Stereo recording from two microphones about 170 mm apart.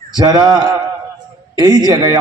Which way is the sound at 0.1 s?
25° right (ahead or behind).